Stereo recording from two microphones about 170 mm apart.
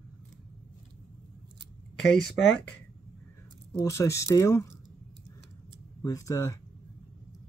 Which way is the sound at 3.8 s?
15° left (ahead or behind).